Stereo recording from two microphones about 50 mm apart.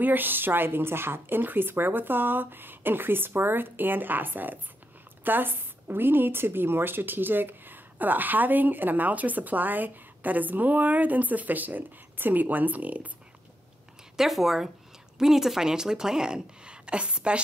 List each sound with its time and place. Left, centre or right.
0.0 s a woman's voice: right
14.1 s a woman's voice: centre; by 17.4 s right